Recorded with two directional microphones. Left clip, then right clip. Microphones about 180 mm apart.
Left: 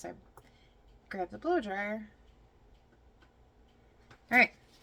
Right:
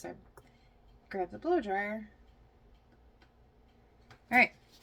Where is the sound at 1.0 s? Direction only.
25° left (ahead or behind).